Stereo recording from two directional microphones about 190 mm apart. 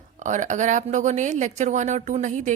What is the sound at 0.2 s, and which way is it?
Speech, 40° right (ahead or behind).